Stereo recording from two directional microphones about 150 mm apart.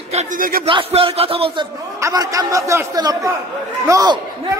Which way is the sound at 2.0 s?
25° right (ahead or behind).